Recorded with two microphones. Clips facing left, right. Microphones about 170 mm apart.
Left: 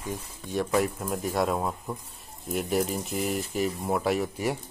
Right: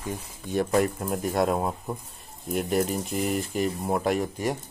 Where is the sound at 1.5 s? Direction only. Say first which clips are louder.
Right 2 dB; 15° right (ahead or behind).